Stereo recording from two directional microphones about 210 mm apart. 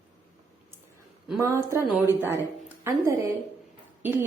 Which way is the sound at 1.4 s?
15° right (ahead or behind).